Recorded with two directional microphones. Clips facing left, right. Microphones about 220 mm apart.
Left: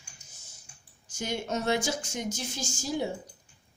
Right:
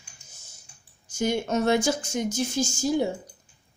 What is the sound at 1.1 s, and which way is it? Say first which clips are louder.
Speech: right 7 dB; 50° right (ahead or behind).